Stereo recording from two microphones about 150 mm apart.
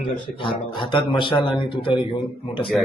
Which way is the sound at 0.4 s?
35° left (ahead or behind).